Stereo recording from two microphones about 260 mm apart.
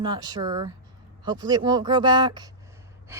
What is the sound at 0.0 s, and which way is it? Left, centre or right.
A woman's voice, centre.